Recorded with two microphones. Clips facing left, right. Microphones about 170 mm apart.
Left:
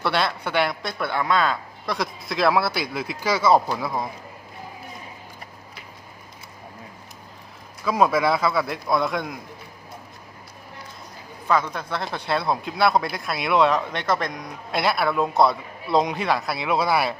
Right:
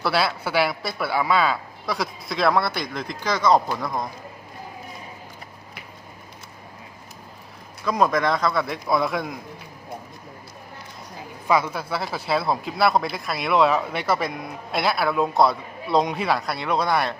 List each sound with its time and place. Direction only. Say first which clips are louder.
0.0 s speech: right 1 dB; 5° right (ahead or behind)
7.9 s speech: left 1 dB; 5° left (ahead or behind)
11.4 s speech: right 1 dB; 10° right (ahead or behind)